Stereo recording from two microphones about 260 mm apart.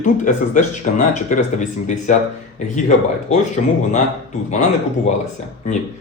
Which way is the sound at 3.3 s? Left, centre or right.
Left.